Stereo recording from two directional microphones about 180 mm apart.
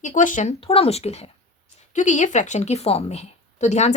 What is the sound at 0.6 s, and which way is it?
Speech, 30° left (ahead or behind).